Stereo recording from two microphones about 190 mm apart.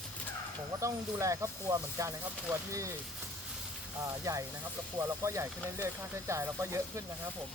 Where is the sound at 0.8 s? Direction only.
15° right (ahead or behind).